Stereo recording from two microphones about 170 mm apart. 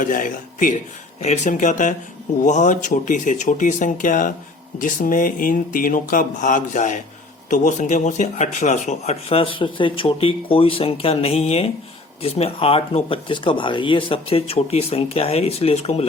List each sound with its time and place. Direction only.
0.0 s speech: 50° left (ahead or behind)